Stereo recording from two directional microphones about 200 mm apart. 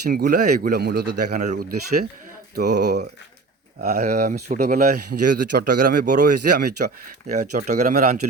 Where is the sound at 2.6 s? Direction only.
55° right (ahead or behind).